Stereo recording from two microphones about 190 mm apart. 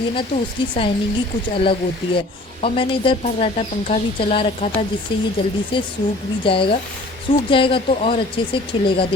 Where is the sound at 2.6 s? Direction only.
25° left (ahead or behind).